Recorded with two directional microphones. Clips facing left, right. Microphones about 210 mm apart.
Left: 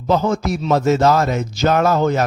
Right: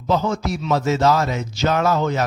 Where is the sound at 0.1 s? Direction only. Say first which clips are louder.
Left 3 dB; 50° left (ahead or behind).